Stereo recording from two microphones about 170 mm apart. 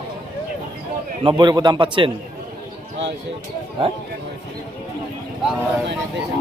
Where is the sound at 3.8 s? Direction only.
35° right (ahead or behind).